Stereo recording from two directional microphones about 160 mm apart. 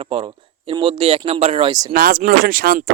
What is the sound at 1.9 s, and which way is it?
Speech, 65° right (ahead or behind).